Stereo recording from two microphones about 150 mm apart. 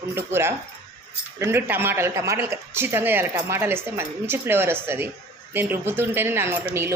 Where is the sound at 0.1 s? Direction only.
15° right (ahead or behind).